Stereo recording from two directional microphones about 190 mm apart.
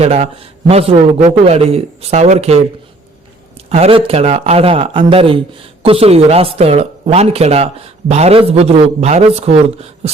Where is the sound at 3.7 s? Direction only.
30° right (ahead or behind).